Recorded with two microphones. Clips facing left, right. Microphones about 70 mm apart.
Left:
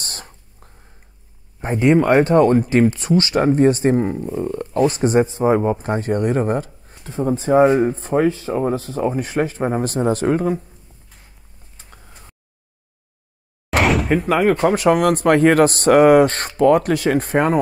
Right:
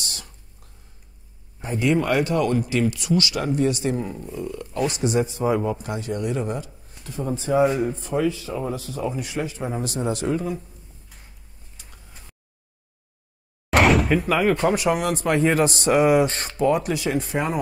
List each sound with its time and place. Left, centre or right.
0.0 s whispering: left
1.6 s speech: left
11.7 s a sound: left
13.7 s door: centre
14.2 s a man's voice: left